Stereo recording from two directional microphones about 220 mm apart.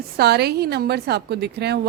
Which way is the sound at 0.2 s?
45° right (ahead or behind).